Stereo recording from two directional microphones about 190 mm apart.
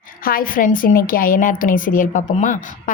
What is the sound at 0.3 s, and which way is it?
A woman's voice, 50° left (ahead or behind).